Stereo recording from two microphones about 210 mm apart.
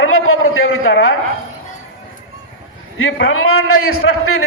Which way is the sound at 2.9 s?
70° left (ahead or behind).